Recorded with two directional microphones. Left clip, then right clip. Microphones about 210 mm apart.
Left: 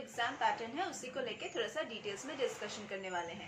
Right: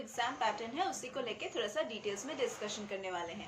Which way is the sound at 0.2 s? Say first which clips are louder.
Even; 15° right (ahead or behind).